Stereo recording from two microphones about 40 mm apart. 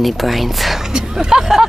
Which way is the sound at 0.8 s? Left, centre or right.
Centre.